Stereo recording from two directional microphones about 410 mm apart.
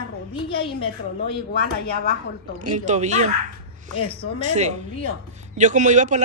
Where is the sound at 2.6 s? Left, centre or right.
Centre.